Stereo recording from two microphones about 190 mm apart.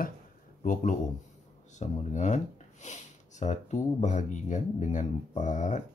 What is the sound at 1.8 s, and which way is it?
Speech, 40° left (ahead or behind).